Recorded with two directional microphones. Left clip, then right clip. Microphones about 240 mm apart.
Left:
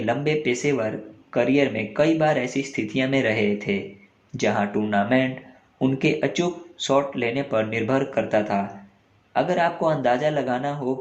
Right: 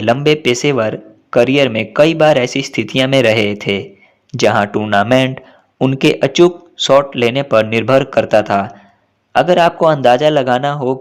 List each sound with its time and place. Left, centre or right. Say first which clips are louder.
0.0 s speech: right 11 dB; right